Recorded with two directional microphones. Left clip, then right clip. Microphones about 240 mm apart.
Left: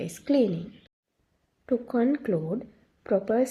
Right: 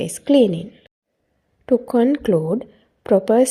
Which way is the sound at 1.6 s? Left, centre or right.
Right.